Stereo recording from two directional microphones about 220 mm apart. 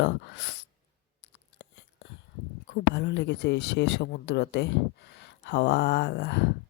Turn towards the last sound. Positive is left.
turn(degrees=50)  # may be behind; listen again after turning